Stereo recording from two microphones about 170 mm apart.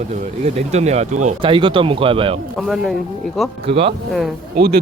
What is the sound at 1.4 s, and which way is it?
Speech, 30° right (ahead or behind).